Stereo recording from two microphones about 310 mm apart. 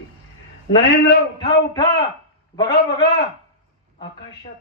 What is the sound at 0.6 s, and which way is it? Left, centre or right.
Speech, left.